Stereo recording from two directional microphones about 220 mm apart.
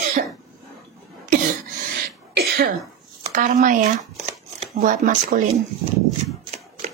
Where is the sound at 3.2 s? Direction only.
35° right (ahead or behind).